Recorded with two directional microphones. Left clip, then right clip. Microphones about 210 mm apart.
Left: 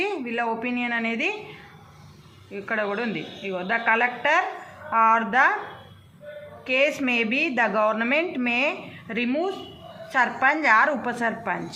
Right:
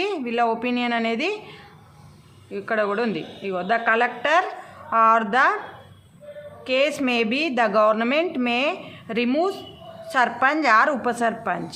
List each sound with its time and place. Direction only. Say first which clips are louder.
0.0 s speech: right 4 dB; 35° right (ahead or behind)
2.5 s a woman's voice: right 3 dB; 35° right (ahead or behind)
6.7 s a woman's voice: right 1 dB; 30° right (ahead or behind)